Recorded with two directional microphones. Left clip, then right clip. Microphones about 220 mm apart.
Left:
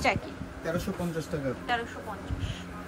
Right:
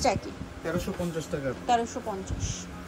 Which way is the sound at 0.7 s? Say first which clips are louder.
Right 1 dB; centre (ahead or behind).